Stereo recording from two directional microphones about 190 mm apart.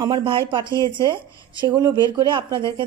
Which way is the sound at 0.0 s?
25° right (ahead or behind).